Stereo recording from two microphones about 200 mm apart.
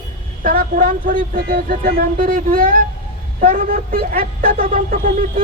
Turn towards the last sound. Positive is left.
turn(degrees=-45)  # may be behind; listen again after turning